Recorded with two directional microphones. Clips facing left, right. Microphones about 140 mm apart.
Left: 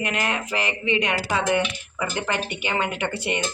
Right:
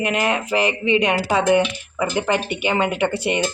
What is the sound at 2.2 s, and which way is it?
Speech, 15° right (ahead or behind).